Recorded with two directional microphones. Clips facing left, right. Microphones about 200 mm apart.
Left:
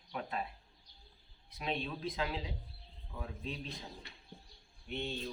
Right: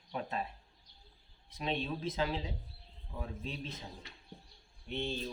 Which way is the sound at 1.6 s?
25° right (ahead or behind).